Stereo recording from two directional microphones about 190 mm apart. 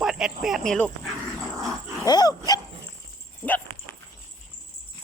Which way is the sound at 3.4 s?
5° left (ahead or behind).